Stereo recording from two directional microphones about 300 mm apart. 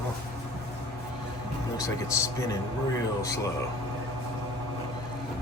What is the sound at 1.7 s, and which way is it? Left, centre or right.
Speech, centre.